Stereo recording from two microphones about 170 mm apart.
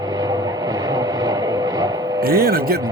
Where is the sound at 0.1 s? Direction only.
20° right (ahead or behind).